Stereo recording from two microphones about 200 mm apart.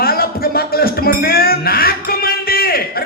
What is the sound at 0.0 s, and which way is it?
Music, 50° left (ahead or behind).